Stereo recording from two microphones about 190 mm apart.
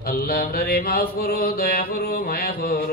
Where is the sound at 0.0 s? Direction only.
50° left (ahead or behind).